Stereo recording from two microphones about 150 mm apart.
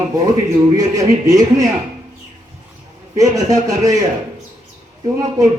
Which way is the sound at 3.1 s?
25° right (ahead or behind).